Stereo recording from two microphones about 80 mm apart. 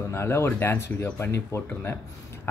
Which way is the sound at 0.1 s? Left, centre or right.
Left.